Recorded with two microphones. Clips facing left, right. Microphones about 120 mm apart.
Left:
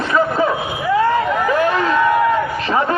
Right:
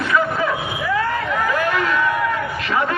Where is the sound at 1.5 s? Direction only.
30° left (ahead or behind).